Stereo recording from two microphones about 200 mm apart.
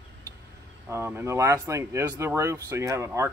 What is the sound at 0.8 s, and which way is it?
Speech, 10° right (ahead or behind).